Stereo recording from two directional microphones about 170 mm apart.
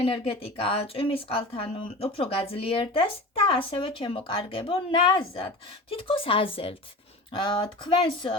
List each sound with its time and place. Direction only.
0.0 s speech: 35° left (ahead or behind)